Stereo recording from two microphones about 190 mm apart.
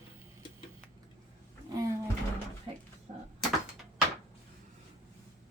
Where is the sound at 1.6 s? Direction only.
20° right (ahead or behind).